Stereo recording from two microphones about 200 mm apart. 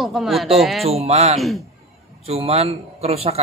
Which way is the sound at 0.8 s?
30° right (ahead or behind).